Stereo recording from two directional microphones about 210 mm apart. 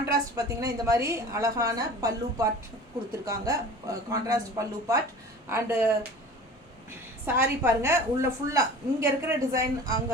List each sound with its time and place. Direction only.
0.1 s a woman's voice: 15° right (ahead or behind)
7.3 s a woman's voice: 10° right (ahead or behind)